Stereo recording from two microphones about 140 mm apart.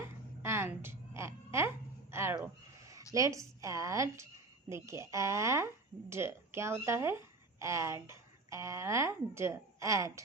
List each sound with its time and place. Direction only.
0.0 s music: 20° right (ahead or behind)
3.1 s speech: 25° right (ahead or behind)